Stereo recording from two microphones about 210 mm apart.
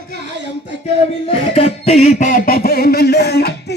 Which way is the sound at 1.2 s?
25° left (ahead or behind).